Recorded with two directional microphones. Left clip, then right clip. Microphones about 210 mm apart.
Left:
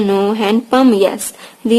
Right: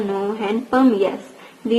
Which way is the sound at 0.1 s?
35° left (ahead or behind).